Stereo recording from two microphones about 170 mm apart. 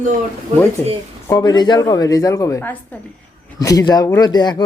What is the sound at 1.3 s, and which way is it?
Speech, 25° left (ahead or behind).